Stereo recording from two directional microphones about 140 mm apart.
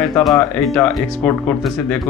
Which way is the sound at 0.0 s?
Centre (ahead or behind).